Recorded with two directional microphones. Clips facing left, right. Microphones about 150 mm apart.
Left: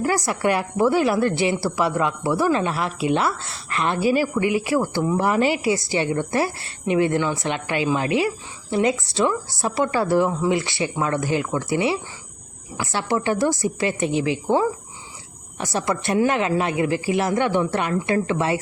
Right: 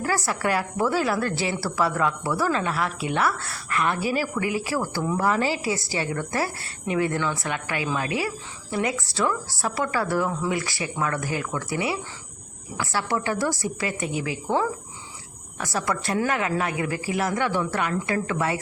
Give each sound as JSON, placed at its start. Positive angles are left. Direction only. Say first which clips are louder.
{"t": 0.0, "sound": "a woman's voice", "louder": "left 4 dB", "side_deg": 20}